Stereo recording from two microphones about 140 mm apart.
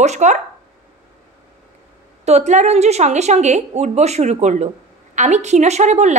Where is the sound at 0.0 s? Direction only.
55° right (ahead or behind).